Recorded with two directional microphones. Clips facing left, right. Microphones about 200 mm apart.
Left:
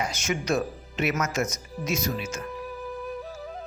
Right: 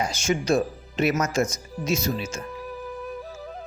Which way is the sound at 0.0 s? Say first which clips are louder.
Right 4 dB; 30° right (ahead or behind).